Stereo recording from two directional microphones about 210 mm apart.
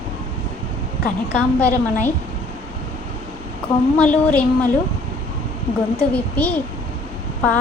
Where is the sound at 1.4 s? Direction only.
5° left (ahead or behind).